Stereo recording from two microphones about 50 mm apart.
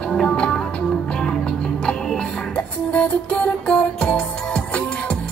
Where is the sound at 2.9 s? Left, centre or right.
Left.